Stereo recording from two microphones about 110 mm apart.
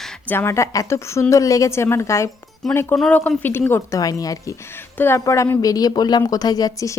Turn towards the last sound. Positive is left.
turn(degrees=35)  # may be behind; listen again after turning